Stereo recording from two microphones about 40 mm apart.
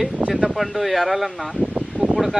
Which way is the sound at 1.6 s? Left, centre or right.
Right.